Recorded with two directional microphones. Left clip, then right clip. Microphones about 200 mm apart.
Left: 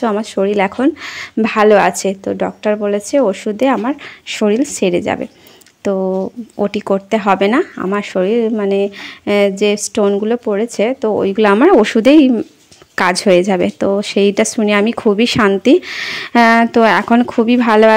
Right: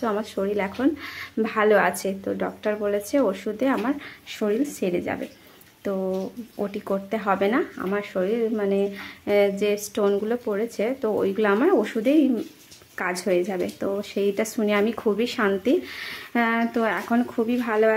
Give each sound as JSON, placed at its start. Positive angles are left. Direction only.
{"t": 0.0, "sound": "speech", "side_deg": 35}